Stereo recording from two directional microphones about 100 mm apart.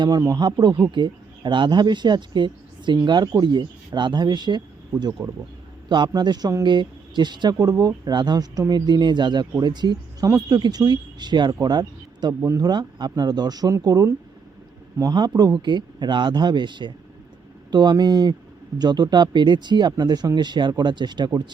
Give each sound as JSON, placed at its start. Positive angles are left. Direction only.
{"t": 0.2, "sound": "speech", "side_deg": -40}
{"t": 0.9, "sound": "speech", "side_deg": -50}
{"t": 10.2, "sound": "speech", "side_deg": -35}
{"t": 12.3, "sound": "speech", "side_deg": -25}
{"t": 12.5, "sound": "speech", "side_deg": -45}
{"t": 15.6, "sound": "speech", "side_deg": -50}